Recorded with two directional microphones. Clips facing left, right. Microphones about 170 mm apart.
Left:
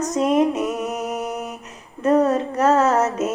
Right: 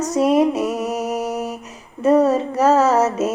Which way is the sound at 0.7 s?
35° right (ahead or behind).